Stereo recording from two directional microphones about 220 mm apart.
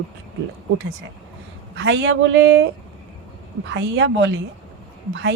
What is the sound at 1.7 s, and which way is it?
Speech, 55° right (ahead or behind).